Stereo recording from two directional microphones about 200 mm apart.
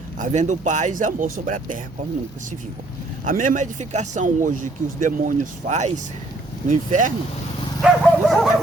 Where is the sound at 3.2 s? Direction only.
40° right (ahead or behind).